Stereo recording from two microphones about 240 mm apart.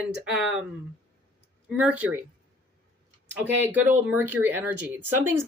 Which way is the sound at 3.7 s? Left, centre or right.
Centre.